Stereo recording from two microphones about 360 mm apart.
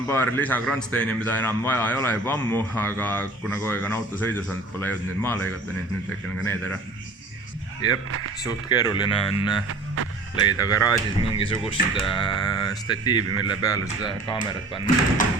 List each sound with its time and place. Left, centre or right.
0.1 s a man's voice: centre
8.4 s speech: centre
9.6 s music: right
10.6 s speech: centre
13.3 s speech: right
14.0 s speech: centre